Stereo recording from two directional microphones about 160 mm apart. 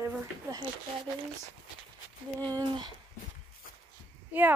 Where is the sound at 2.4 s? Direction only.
25° right (ahead or behind).